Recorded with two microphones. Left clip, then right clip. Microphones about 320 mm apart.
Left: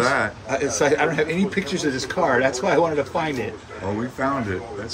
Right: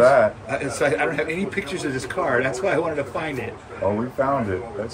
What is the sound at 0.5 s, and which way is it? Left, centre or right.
A man's voice, left.